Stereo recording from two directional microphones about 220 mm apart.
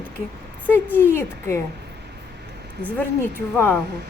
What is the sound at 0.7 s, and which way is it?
Speech, 10° left (ahead or behind).